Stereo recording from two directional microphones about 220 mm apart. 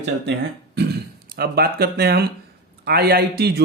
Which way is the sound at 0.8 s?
45° right (ahead or behind).